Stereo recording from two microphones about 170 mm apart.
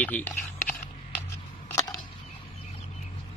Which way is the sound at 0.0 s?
10° left (ahead or behind).